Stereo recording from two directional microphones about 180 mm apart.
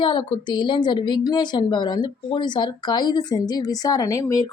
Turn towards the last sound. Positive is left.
turn(degrees=20)  # may be behind; listen again after turning